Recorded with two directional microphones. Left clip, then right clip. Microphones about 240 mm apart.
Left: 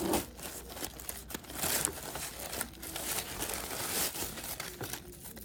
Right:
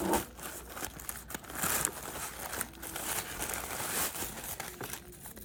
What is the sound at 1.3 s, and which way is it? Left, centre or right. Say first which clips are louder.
Crumpling: right 1 dB; centre.